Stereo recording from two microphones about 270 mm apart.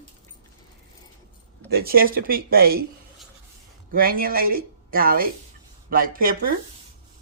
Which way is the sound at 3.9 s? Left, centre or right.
Right.